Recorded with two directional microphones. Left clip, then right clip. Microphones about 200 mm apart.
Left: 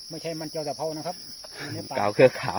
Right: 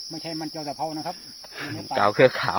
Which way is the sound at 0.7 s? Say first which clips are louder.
Right 1 dB; 35° left (ahead or behind).